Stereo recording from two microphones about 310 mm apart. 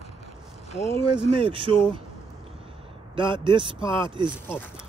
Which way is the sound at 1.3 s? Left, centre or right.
Centre.